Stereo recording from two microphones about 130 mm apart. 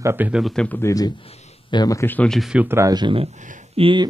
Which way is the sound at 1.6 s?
35° left (ahead or behind).